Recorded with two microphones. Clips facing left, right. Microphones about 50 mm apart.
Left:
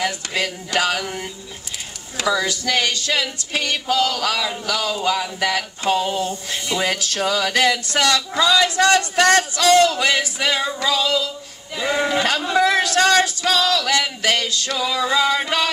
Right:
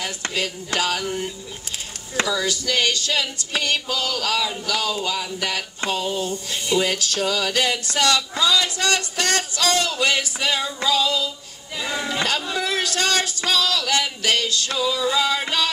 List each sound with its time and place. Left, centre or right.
0.0 s speech: left
12.4 s a man's voice: left
12.8 s speech: left
14.8 s a man's voice: left
15.0 s speech: left